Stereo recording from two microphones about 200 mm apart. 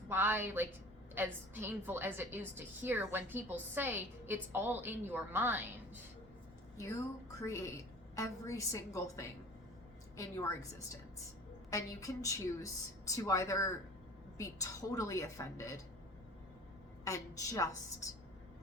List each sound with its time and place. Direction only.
0.1 s a woman's voice: 10° right (ahead or behind)
7.4 s a woman's voice: 15° left (ahead or behind)
17.0 s a woman's voice: 15° left (ahead or behind)